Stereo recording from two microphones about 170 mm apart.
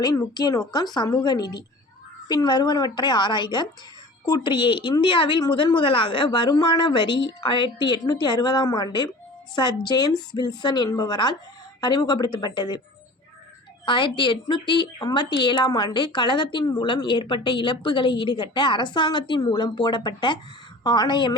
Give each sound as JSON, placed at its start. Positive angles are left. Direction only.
{"t": 0.0, "sound": "a woman's voice", "side_deg": 20}
{"t": 13.8, "sound": "a woman's voice", "side_deg": 30}